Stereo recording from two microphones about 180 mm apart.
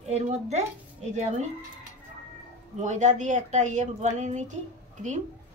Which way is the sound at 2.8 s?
40° right (ahead or behind).